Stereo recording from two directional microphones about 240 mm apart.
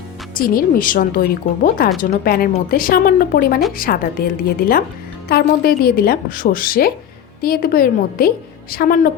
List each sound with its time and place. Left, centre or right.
0.3 s speech: left
5.3 s speech: left